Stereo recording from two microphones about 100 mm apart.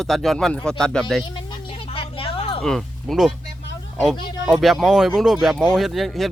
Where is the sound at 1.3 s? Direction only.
60° left (ahead or behind).